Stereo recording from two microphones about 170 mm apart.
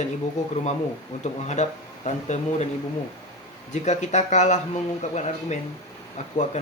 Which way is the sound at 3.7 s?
45° left (ahead or behind).